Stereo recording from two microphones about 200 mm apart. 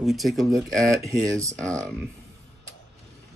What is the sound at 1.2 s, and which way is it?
Speech, 15° right (ahead or behind).